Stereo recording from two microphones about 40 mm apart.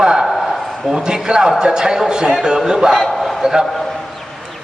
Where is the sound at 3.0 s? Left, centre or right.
Centre.